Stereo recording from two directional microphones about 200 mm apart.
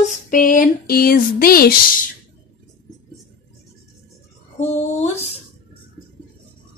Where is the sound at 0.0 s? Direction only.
40° left (ahead or behind).